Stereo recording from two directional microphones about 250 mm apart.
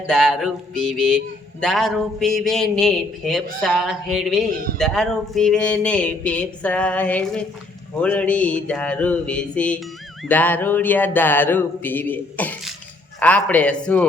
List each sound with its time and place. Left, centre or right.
0.1 s a man's voice: centre
10.2 s a sound: centre
13.1 s a man's voice: centre